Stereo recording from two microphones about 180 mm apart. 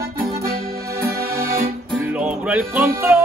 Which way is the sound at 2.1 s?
5° right (ahead or behind).